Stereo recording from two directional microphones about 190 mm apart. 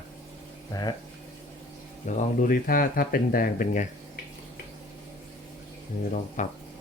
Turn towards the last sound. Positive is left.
turn(degrees=40)  # may be behind; listen again after turning